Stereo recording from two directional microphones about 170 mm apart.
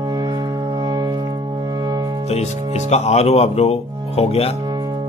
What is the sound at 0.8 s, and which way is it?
Music, 25° right (ahead or behind).